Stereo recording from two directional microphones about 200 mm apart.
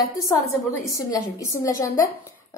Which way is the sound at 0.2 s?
15° left (ahead or behind).